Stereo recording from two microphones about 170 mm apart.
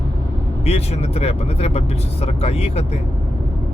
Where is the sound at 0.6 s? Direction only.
40° left (ahead or behind).